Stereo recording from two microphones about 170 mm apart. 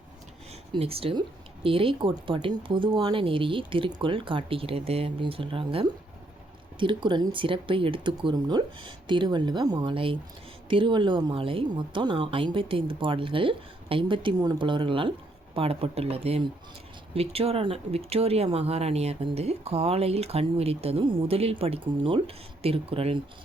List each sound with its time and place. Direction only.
0.7 s a woman's voice: 35° right (ahead or behind)